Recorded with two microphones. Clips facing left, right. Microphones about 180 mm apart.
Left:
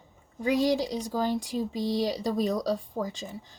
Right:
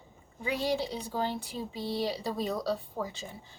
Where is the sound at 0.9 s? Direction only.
40° left (ahead or behind).